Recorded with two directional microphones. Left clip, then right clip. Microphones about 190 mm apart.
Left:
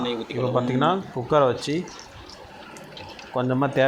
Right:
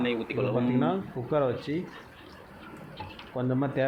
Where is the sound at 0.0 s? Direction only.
10° left (ahead or behind).